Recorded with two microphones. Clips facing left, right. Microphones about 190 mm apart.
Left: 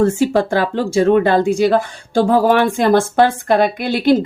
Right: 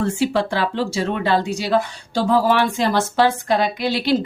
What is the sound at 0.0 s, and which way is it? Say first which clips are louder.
Speech: left 5 dB; 45° left (ahead or behind).